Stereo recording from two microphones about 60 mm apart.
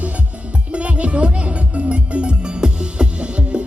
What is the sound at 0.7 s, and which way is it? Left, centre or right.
Music, right.